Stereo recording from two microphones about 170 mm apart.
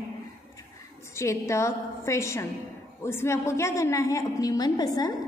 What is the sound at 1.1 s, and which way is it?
A woman's voice, 15° left (ahead or behind).